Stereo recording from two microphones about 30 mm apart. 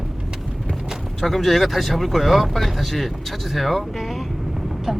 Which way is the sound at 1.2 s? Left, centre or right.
Centre.